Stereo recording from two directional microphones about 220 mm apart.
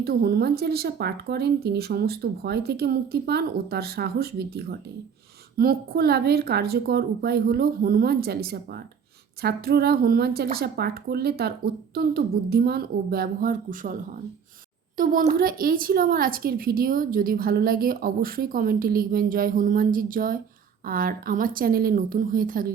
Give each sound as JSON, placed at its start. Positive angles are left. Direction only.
{"t": 0.0, "sound": "speech", "side_deg": -45}
{"t": 14.9, "sound": "speech", "side_deg": -40}